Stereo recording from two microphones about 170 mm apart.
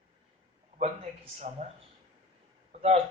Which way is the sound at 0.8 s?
40° right (ahead or behind).